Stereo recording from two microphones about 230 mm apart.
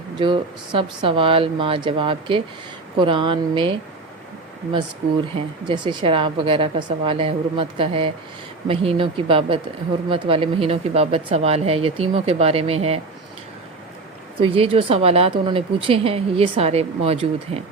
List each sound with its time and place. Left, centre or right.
0.2 s a woman's voice: right
5.6 s a woman's voice: centre
14.4 s a woman's voice: right